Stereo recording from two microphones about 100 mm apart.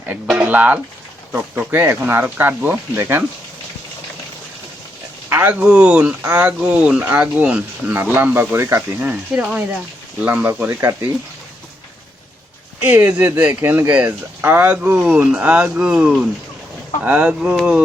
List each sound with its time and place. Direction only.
0.3 s speech: 15° right (ahead or behind)
5.3 s speech: 20° right (ahead or behind)
12.8 s speech: 15° right (ahead or behind)